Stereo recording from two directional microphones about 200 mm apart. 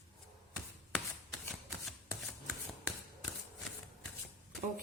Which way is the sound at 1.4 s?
5° left (ahead or behind).